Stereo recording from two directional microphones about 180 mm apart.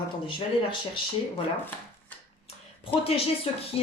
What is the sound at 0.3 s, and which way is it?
Speech, 30° left (ahead or behind).